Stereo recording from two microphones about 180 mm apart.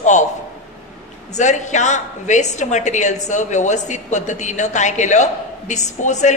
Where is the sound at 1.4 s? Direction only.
40° left (ahead or behind).